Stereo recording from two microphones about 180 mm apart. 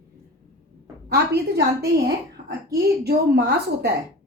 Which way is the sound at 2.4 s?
45° right (ahead or behind).